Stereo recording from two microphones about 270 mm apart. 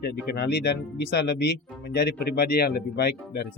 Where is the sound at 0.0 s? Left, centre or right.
Left.